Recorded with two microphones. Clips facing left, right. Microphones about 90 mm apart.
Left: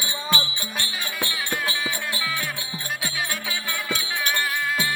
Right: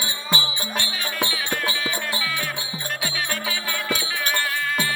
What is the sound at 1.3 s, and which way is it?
Music, 5° left (ahead or behind).